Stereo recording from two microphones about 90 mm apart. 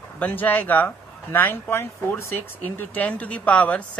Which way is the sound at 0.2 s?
20° left (ahead or behind).